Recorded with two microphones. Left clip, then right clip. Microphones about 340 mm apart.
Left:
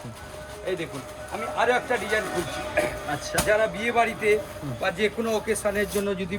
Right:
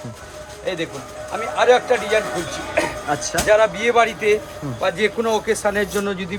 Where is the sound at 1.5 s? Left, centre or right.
Right.